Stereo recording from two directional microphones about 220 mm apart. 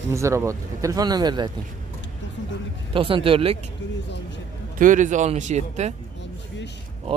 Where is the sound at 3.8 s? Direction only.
55° left (ahead or behind).